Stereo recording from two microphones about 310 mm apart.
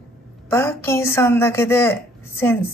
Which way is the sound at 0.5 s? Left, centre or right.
Centre.